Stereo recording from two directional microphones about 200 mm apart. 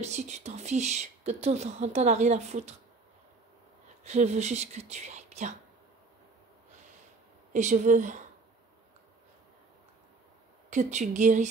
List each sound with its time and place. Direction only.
0.0 s speech: 35° right (ahead or behind)
4.0 s speech: 35° right (ahead or behind)
7.5 s speech: 40° right (ahead or behind)
10.7 s speech: 35° right (ahead or behind)